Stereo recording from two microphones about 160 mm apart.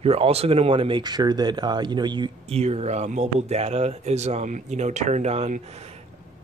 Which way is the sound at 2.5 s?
40° right (ahead or behind).